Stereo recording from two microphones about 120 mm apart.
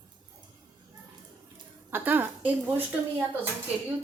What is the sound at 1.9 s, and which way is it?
A woman's voice, 15° right (ahead or behind).